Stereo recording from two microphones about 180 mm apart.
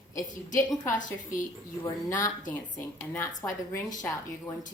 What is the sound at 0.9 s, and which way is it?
Speech, 45° left (ahead or behind).